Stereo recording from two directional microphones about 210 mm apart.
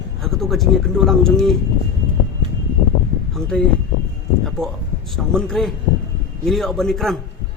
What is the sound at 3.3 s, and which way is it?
Speech, 5° left (ahead or behind).